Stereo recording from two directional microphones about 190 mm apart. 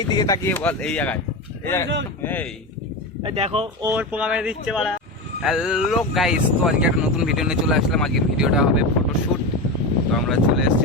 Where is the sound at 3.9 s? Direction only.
10° right (ahead or behind).